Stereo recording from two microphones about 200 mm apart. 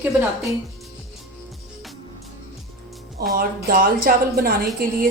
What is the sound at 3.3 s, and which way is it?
Speech, 45° right (ahead or behind).